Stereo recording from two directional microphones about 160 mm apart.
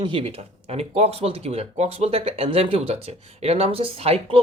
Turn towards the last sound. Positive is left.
turn(degrees=-40)  # may be behind; listen again after turning